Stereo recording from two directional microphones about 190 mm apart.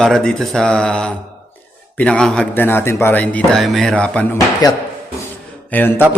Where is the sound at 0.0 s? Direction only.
5° left (ahead or behind).